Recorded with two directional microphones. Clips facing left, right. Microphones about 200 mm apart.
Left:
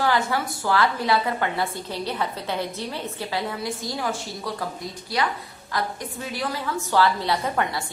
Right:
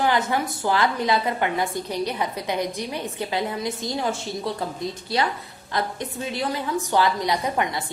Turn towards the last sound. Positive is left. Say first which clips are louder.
# right 1 dB
turn(degrees=-20)  # may be behind; listen again after turning